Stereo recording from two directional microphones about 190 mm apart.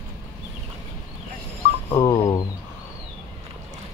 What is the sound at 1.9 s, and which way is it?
Speech, 15° left (ahead or behind).